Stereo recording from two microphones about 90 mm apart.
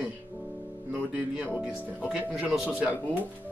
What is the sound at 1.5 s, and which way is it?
Speech, 10° right (ahead or behind).